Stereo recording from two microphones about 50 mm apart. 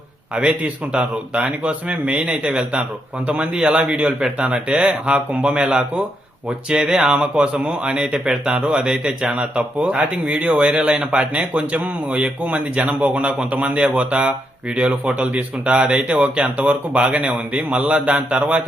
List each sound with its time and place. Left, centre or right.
0.3 s speech: right
7.9 s speech: centre